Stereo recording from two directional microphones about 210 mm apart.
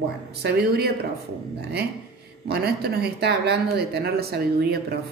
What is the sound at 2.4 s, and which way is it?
Speech, 50° right (ahead or behind).